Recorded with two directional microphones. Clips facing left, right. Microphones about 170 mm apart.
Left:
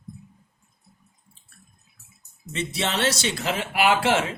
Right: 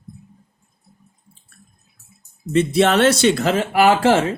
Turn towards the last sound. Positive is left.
turn(degrees=-40)  # may be behind; listen again after turning